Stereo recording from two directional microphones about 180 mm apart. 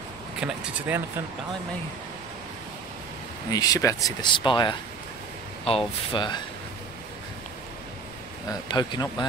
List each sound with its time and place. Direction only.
0.4 s speech: 10° right (ahead or behind)
3.4 s speech: 20° left (ahead or behind)
8.5 s speech: 25° left (ahead or behind)